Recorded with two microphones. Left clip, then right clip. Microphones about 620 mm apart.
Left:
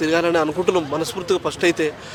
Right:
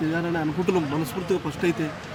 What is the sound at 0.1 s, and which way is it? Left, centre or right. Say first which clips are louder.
Speech: left 9 dB; left.